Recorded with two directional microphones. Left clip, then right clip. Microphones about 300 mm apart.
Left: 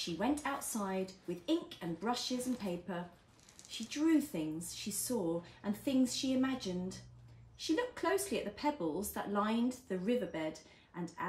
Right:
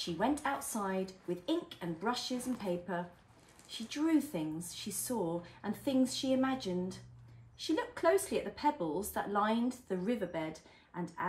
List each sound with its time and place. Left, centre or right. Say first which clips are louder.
0.0 s speech: right 2 dB; centre